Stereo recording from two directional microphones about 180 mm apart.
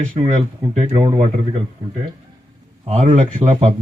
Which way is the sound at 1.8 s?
20° right (ahead or behind).